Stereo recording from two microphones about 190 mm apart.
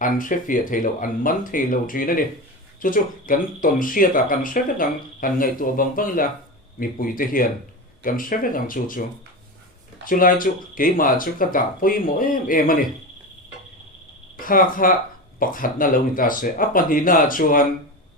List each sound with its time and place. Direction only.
0.0 s speech: 45° left (ahead or behind)
14.3 s speech: 45° left (ahead or behind)